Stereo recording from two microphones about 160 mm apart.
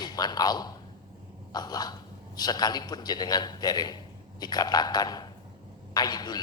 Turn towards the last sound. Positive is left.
turn(degrees=25)  # may be behind; listen again after turning